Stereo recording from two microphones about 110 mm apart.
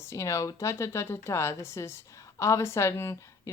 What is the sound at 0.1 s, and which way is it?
Speech, 25° left (ahead or behind).